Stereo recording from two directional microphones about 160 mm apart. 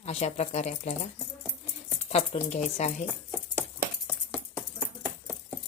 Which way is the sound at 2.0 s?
40° left (ahead or behind).